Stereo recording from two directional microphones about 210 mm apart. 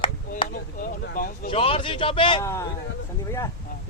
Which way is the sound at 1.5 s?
25° left (ahead or behind).